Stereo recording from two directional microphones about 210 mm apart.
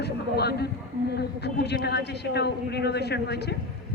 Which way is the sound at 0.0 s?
50° left (ahead or behind).